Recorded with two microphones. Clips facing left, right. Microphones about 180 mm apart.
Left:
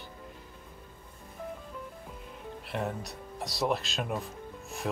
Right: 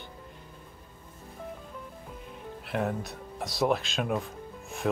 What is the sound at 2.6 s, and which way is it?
Speech, centre (ahead or behind).